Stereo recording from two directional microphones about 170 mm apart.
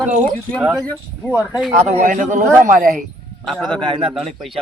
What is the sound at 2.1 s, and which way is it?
Speech, 50° right (ahead or behind).